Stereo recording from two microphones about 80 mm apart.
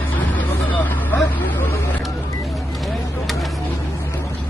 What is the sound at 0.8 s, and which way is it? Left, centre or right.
Vehicle, left.